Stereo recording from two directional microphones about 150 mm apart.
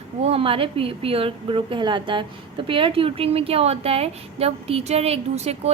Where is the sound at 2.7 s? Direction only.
35° right (ahead or behind).